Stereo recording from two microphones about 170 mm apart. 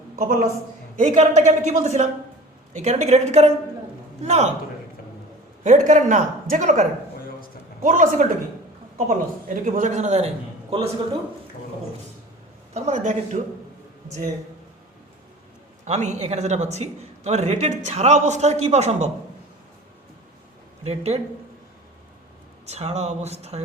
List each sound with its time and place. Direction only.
0.2 s speech: 50° right (ahead or behind)
5.6 s speech: 45° right (ahead or behind)
12.7 s speech: 45° right (ahead or behind)
15.8 s speech: 45° right (ahead or behind)
20.8 s speech: 40° right (ahead or behind)
22.6 s speech: 40° right (ahead or behind)